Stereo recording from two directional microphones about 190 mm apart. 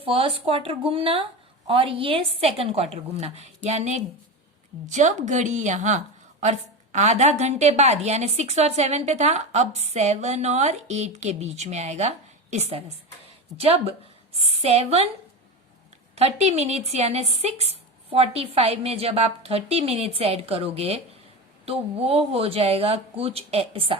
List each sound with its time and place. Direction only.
0.0 s a woman's voice: 30° right (ahead or behind)
16.1 s a woman's voice: 35° right (ahead or behind)